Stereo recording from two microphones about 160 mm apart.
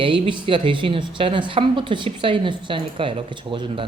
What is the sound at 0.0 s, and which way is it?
Speech, 30° right (ahead or behind).